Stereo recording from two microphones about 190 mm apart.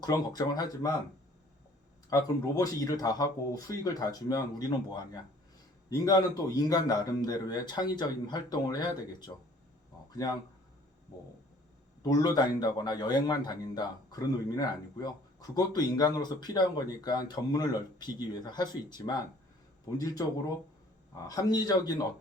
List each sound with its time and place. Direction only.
0.0 s a man's voice: 20° left (ahead or behind)
2.1 s a man's voice: 15° left (ahead or behind)
12.0 s a man's voice: 20° left (ahead or behind)
21.2 s a man's voice: 20° left (ahead or behind)